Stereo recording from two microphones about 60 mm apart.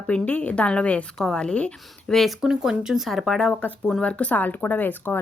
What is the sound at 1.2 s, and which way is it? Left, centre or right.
Speech, centre.